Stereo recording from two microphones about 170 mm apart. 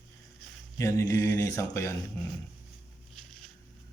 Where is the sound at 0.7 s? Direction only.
20° left (ahead or behind).